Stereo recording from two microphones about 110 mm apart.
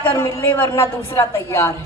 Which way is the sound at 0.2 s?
25° left (ahead or behind).